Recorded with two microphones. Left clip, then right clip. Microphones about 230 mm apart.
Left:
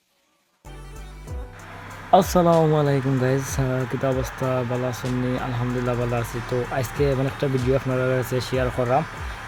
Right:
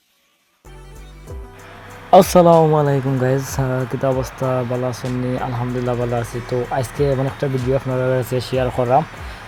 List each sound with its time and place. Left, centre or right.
2.0 s speech: centre
2.5 s speech: centre
3.3 s speech: centre
3.6 s speech: centre